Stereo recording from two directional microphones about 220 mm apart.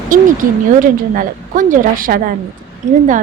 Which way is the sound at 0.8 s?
35° right (ahead or behind).